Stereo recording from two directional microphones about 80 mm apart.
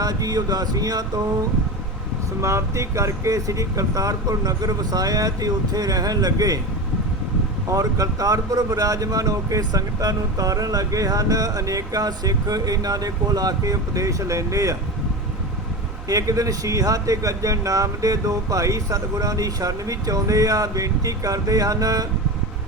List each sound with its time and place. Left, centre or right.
0.0 s speech: right
2.4 s speech: right
7.7 s speech: right
16.0 s speech: right